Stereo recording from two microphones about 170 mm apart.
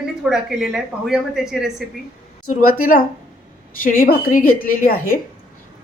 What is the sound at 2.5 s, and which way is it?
Speech, 55° left (ahead or behind).